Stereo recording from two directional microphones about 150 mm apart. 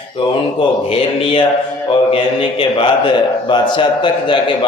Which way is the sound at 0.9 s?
40° left (ahead or behind).